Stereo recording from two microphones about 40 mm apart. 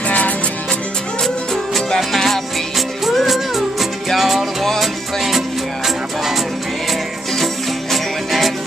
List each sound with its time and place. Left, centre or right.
1.2 s music: centre
4.2 s music: centre
7.9 s music: centre